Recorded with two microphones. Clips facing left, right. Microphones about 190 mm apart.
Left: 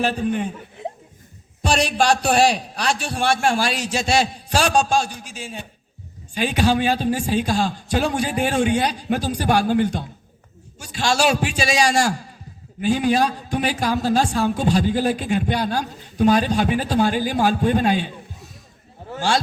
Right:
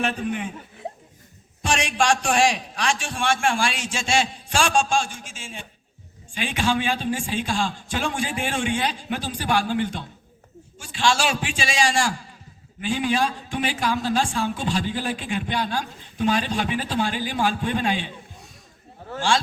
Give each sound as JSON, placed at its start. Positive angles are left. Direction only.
{"t": 0.0, "sound": "a man's voice", "side_deg": 35}
{"t": 1.6, "sound": "a man's voice", "side_deg": 35}